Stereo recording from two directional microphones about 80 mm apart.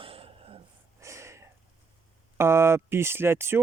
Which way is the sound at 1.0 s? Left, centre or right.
Right.